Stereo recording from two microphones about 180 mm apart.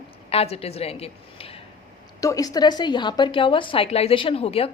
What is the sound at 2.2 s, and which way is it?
A woman's voice, 20° left (ahead or behind).